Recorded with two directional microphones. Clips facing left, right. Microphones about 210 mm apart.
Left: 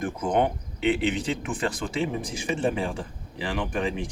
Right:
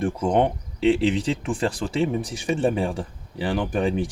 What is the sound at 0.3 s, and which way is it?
Speech, 30° right (ahead or behind).